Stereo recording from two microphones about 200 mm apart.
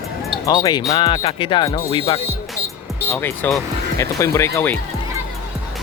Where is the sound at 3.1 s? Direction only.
10° left (ahead or behind).